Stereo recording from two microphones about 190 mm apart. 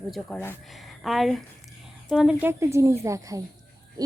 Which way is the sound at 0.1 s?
Centre (ahead or behind).